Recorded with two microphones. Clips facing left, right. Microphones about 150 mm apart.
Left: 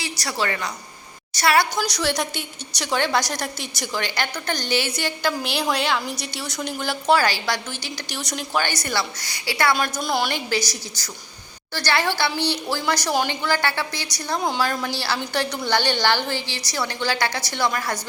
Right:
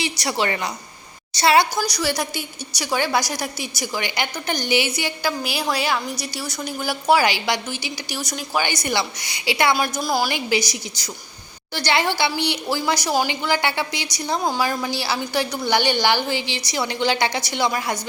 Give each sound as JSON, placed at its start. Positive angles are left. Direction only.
{"t": 0.0, "sound": "a woman's voice", "side_deg": -25}
{"t": 1.7, "sound": "a woman's voice", "side_deg": -5}
{"t": 8.6, "sound": "a woman's voice", "side_deg": -15}
{"t": 9.7, "sound": "a woman's voice", "side_deg": -10}
{"t": 10.3, "sound": "a woman's voice", "side_deg": -15}